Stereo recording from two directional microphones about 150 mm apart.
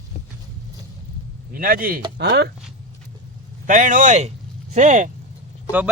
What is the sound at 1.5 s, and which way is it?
Speech, 70° right (ahead or behind).